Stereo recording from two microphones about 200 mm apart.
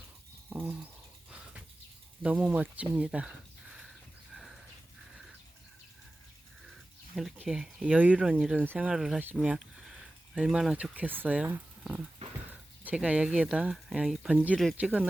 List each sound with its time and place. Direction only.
0.5 s speech: 10° right (ahead or behind)
2.2 s speech: 5° right (ahead or behind)
7.2 s speech: centre (ahead or behind)